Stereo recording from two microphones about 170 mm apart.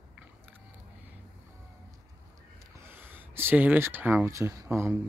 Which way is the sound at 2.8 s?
15° right (ahead or behind).